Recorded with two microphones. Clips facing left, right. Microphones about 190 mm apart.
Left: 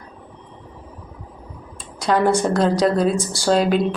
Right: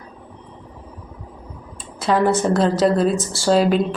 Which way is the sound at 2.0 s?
Centre (ahead or behind).